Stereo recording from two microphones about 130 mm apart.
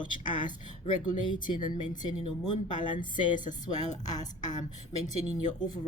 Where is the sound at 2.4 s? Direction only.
35° left (ahead or behind).